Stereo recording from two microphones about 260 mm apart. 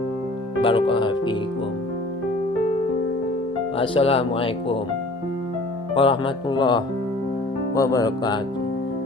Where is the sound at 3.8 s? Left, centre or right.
Left.